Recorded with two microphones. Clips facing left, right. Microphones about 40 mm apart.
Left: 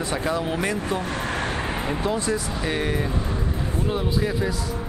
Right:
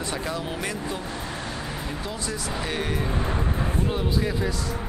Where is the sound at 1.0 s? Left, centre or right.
Left; by 2.5 s centre.